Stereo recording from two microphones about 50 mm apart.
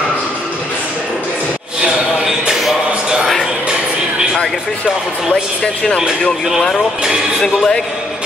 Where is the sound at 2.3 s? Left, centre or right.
Centre.